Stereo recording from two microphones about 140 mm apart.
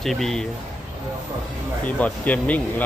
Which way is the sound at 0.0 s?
5° left (ahead or behind).